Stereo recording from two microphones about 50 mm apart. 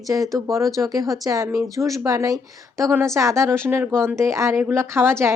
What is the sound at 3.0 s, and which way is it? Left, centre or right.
A woman's voice, right.